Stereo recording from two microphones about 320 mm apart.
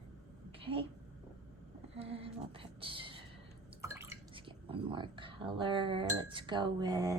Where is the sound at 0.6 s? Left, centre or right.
Centre.